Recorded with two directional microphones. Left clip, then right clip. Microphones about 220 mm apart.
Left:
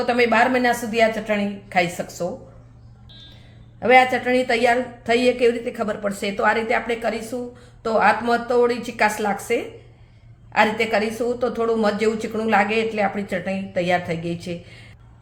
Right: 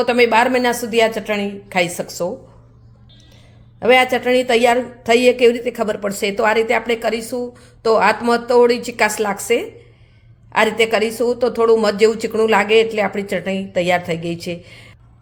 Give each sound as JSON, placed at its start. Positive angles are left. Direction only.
{"t": 0.0, "sound": "a woman's voice", "side_deg": -40}
{"t": 3.8, "sound": "a woman's voice", "side_deg": -40}